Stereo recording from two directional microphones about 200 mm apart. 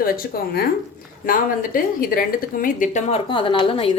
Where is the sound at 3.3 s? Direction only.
25° left (ahead or behind).